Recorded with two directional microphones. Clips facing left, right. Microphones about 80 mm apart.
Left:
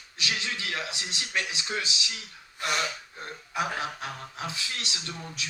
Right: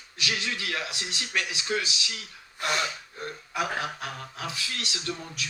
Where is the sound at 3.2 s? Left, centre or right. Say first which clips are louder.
Even; left.